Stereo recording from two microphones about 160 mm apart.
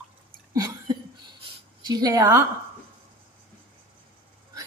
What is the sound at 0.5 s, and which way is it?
Cough, 25° right (ahead or behind).